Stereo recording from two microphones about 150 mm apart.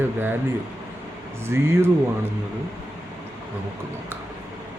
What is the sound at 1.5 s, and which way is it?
Speech, 15° right (ahead or behind).